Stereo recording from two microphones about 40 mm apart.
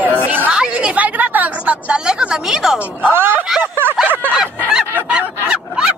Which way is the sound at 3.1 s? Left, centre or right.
Right.